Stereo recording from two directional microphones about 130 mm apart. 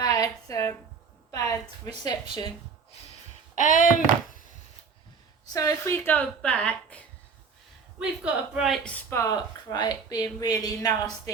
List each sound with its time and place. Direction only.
0.0 s a sound: 25° left (ahead or behind)
1.3 s speech: 25° left (ahead or behind)
3.5 s speech: 85° left
5.5 s a woman's voice: 25° left (ahead or behind)
7.9 s a woman's voice: 5° right (ahead or behind)
8.9 s speech: 20° left (ahead or behind)